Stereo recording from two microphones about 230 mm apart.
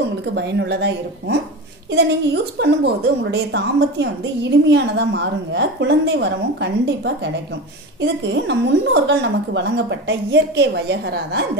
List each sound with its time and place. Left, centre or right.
0.3 s a woman's voice: right